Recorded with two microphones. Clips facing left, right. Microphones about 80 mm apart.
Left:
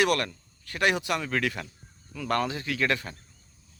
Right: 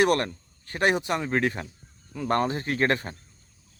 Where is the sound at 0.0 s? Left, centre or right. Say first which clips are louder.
Right 3 dB; right.